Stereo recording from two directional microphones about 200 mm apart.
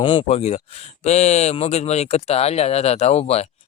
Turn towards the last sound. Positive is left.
turn(degrees=30)  # may be behind; listen again after turning